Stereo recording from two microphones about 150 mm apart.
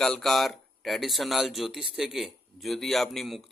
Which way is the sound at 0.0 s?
5° left (ahead or behind).